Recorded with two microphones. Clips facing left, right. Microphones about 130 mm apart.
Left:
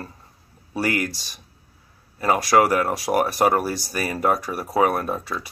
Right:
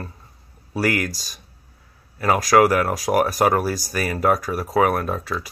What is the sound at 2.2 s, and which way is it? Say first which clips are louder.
Speech: right 2 dB; 30° left (ahead or behind).